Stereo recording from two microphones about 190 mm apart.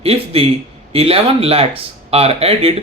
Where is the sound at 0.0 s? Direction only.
30° right (ahead or behind).